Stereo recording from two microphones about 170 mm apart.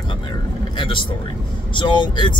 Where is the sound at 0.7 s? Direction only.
30° left (ahead or behind).